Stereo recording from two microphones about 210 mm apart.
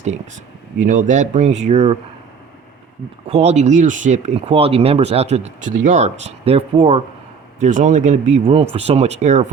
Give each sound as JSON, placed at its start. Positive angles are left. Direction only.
{"t": 0.8, "sound": "speech", "side_deg": -35}
{"t": 3.2, "sound": "speech", "side_deg": -30}